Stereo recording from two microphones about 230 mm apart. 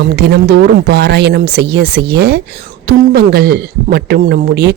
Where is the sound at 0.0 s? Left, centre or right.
Right.